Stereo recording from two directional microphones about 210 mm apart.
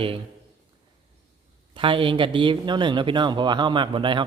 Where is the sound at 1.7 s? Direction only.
25° right (ahead or behind).